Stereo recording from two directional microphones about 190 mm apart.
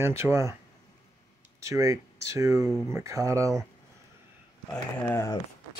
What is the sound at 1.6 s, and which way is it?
Speech, 15° right (ahead or behind).